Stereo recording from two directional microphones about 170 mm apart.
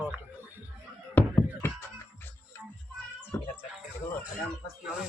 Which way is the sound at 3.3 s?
15° left (ahead or behind).